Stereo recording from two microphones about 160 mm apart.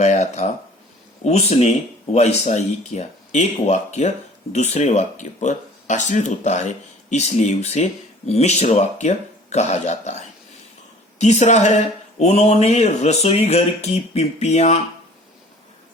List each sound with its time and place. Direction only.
0.0 s speech: 45° left (ahead or behind)